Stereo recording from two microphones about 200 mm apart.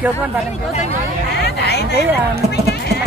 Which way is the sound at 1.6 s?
55° left (ahead or behind).